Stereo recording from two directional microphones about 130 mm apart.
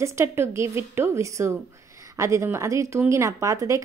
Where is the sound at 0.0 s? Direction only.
20° right (ahead or behind).